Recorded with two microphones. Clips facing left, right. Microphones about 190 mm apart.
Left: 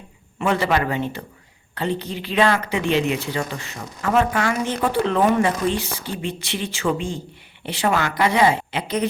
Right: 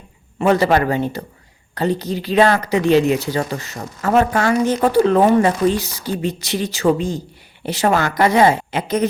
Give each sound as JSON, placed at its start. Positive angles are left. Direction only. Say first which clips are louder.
{"t": 0.3, "sound": "speech", "louder": "right 6 dB", "side_deg": -40}